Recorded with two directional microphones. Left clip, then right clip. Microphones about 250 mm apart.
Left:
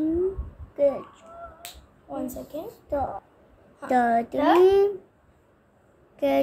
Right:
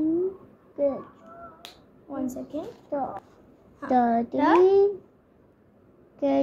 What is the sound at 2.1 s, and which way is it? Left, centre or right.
Speech, left.